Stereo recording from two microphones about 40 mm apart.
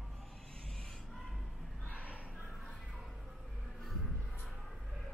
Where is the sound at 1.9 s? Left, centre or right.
Right.